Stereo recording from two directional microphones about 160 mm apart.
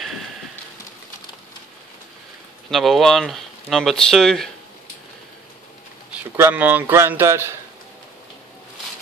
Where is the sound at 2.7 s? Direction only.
Centre (ahead or behind).